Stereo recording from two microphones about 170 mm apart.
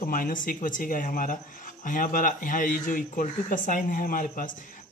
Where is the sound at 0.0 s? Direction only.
55° left (ahead or behind).